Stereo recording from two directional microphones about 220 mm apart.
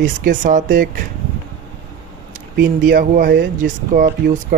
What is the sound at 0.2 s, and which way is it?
Speech, 35° right (ahead or behind).